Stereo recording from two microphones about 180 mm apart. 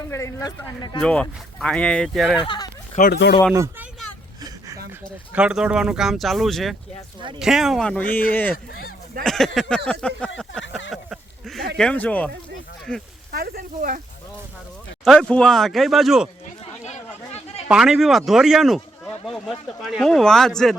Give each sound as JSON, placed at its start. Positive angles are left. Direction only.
{"t": 0.1, "sound": "speech", "side_deg": 15}
{"t": 1.0, "sound": "speech", "side_deg": 5}
{"t": 2.4, "sound": "speech", "side_deg": 25}
{"t": 2.9, "sound": "speech", "side_deg": 50}
{"t": 3.5, "sound": "speech", "side_deg": -15}
{"t": 5.3, "sound": "speech", "side_deg": -5}
{"t": 10.9, "sound": "a sound", "side_deg": 0}
{"t": 11.8, "sound": "speech", "side_deg": 5}
{"t": 13.3, "sound": "speech", "side_deg": -55}
{"t": 15.0, "sound": "speech", "side_deg": 0}
{"t": 16.6, "sound": "a sound", "side_deg": 35}
{"t": 17.7, "sound": "speech", "side_deg": 0}